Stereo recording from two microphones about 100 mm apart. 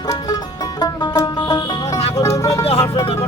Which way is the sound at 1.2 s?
35° left (ahead or behind).